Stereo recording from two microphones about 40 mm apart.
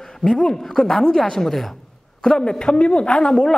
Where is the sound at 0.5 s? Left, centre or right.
Centre.